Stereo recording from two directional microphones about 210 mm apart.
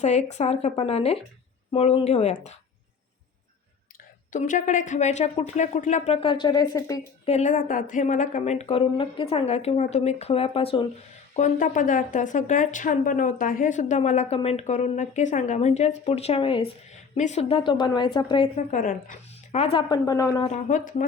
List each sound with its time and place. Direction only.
0.0 s a woman's voice: 35° left (ahead or behind)
3.9 s a woman's voice: 40° left (ahead or behind); by 7.0 s 15° left (ahead or behind)
7.3 s a woman's voice: 35° left (ahead or behind)
11.3 s a woman's voice: 35° left (ahead or behind); by 20.5 s 15° left (ahead or behind)
20.5 s a woman's voice: 35° left (ahead or behind)